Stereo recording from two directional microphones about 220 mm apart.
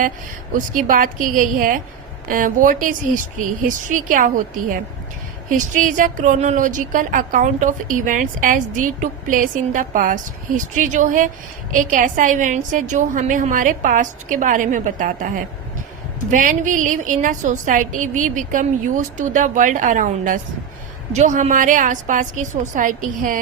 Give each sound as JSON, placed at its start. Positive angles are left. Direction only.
{"t": 0.5, "sound": "a woman's voice", "side_deg": -35}
{"t": 5.5, "sound": "a woman's voice", "side_deg": -35}